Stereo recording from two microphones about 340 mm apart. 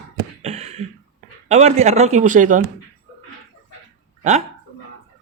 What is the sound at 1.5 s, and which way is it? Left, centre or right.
Speech, centre.